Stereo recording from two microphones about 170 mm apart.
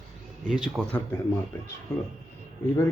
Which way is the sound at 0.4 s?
5° right (ahead or behind).